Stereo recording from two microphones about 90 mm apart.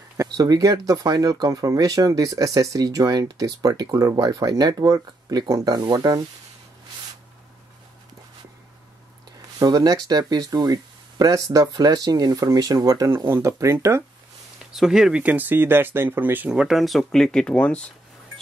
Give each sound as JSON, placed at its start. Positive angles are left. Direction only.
{"t": 0.2, "sound": "speech", "side_deg": -40}
{"t": 9.6, "sound": "speech", "side_deg": -50}
{"t": 14.6, "sound": "speech", "side_deg": -5}
{"t": 15.2, "sound": "speech", "side_deg": -20}
{"t": 16.4, "sound": "speech", "side_deg": -5}